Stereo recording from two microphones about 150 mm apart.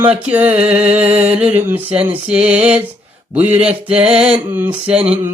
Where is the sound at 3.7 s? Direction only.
10° right (ahead or behind).